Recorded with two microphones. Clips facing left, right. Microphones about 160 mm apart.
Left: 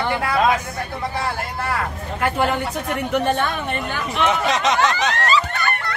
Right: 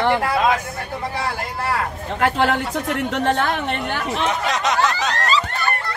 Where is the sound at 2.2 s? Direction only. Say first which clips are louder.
Right 2 dB; 85° right; by 4.1 s 65° right (ahead or behind).